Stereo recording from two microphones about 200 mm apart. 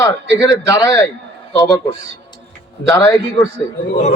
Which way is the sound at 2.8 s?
15° left (ahead or behind).